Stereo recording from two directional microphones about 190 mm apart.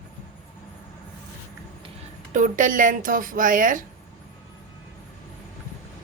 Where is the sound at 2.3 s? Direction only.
40° right (ahead or behind).